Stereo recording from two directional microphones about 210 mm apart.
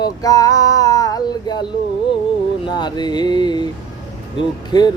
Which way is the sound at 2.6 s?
20° left (ahead or behind).